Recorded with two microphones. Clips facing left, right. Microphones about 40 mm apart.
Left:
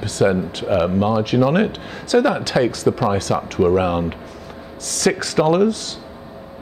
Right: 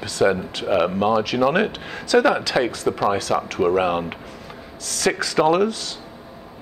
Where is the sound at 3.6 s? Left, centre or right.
Right.